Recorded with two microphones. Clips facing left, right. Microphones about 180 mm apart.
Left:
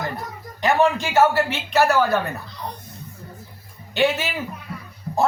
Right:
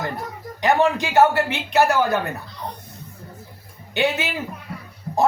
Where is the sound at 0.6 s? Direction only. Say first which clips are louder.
Even; 15° right (ahead or behind).